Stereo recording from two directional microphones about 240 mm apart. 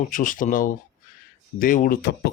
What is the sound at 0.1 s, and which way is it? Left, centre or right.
A man's voice, left.